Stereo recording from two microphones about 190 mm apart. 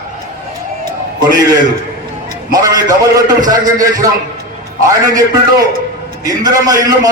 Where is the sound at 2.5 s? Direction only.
20° right (ahead or behind).